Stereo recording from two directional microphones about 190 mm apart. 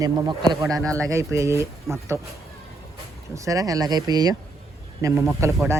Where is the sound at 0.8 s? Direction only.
5° left (ahead or behind).